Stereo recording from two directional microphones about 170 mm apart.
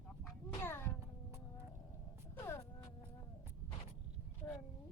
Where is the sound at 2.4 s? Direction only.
15° left (ahead or behind).